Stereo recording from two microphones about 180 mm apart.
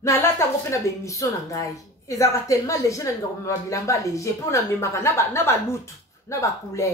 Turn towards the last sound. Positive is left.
turn(degrees=15)  # may be behind; listen again after turning